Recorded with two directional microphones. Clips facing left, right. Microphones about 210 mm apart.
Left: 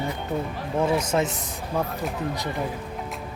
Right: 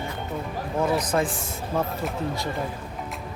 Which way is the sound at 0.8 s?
25° left (ahead or behind).